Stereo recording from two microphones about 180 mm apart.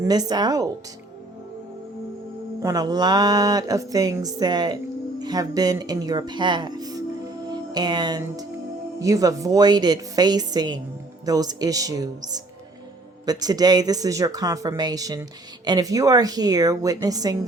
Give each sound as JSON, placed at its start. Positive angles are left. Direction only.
{"t": 0.0, "sound": "speech", "side_deg": -20}
{"t": 2.6, "sound": "speech", "side_deg": -20}